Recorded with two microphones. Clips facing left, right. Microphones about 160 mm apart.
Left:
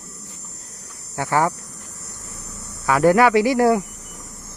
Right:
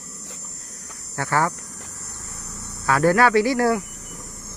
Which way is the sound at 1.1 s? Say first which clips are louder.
Left 3 dB; 15° left (ahead or behind).